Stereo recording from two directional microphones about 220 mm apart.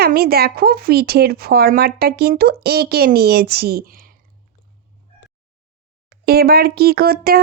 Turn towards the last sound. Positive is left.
turn(degrees=-45)  # may be behind; listen again after turning